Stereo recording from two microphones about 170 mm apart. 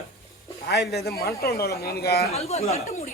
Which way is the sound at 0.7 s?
75° left (ahead or behind).